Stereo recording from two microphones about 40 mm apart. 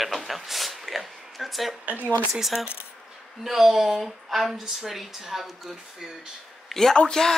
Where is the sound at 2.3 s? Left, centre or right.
Centre.